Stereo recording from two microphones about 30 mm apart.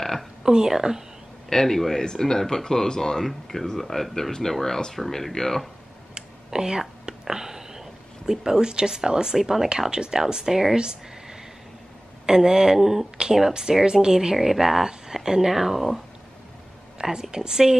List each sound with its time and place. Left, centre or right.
0.4 s a woman's voice: right
1.5 s speech: centre
6.1 s a sound: right
9.4 s speech: centre
9.8 s a woman's voice: right
10.3 s speech: centre
12.3 s a woman's voice: right
13.5 s a woman's voice: right
14.3 s speech: centre
17.0 s a woman's voice: centre